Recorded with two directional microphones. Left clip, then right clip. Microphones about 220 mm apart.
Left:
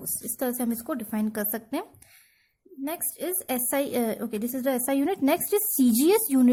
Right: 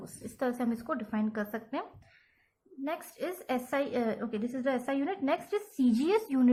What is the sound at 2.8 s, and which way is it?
Speech, 50° left (ahead or behind).